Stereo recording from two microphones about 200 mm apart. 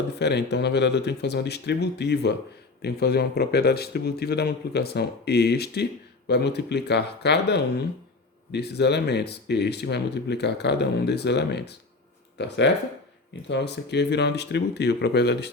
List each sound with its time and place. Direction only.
0.2 s a man's voice: 60° left (ahead or behind)